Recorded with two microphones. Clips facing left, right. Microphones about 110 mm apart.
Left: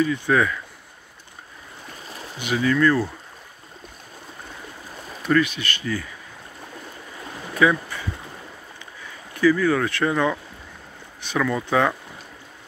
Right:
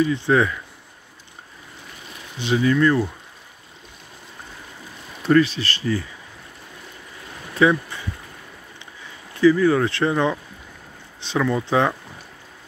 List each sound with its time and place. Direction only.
0.0 s speech: 25° right (ahead or behind)
2.3 s speech: 25° right (ahead or behind)
5.2 s speech: 30° right (ahead or behind)
7.5 s speech: 25° right (ahead or behind)
9.3 s speech: 25° right (ahead or behind)